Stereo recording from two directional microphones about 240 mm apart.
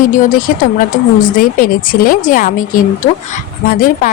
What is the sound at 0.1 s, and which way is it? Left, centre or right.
Speech, left.